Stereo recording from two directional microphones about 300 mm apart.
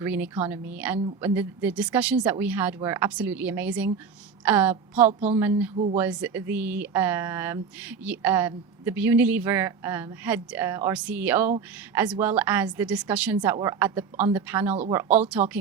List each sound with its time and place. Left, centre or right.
0.0 s speech: centre
5.7 s speech: right
6.0 s speech: centre